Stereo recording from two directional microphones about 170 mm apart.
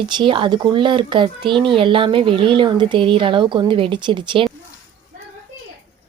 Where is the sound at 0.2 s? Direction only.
30° right (ahead or behind).